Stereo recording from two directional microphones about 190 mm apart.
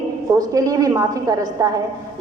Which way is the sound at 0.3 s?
20° right (ahead or behind).